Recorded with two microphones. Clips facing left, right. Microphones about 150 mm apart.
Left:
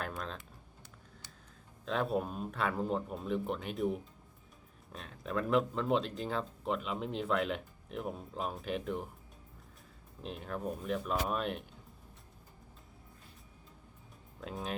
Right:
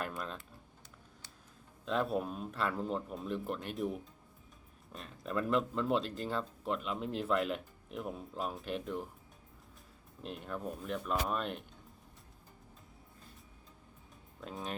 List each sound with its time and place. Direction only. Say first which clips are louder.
1.8 s speech: even; centre (ahead or behind)
10.2 s speech: left 2 dB; centre (ahead or behind)
14.4 s speech: left 2 dB; centre (ahead or behind)